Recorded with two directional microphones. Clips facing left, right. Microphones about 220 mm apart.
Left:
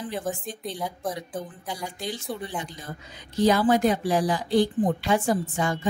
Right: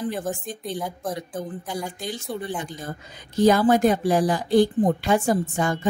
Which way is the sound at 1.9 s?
50° right (ahead or behind).